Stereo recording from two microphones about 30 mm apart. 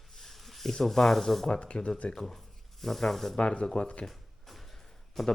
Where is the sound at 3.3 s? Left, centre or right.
Left.